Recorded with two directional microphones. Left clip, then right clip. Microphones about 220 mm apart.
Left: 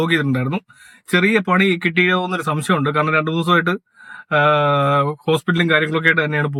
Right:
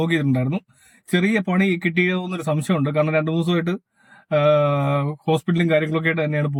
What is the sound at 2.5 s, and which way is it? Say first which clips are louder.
Speech: left 2 dB; 5° right (ahead or behind).